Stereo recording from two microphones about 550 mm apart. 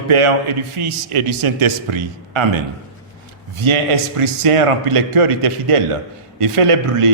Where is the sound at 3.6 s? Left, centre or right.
Right.